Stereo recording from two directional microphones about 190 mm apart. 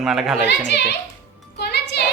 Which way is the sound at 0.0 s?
Centre (ahead or behind).